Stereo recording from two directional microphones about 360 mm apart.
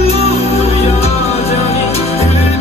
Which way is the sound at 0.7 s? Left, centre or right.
Centre.